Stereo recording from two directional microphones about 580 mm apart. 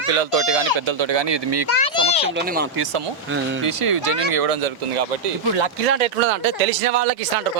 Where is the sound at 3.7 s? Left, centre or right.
Right.